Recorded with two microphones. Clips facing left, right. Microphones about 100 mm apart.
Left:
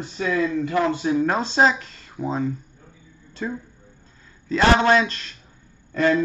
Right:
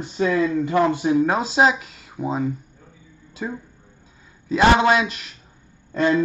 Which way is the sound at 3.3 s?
10° right (ahead or behind).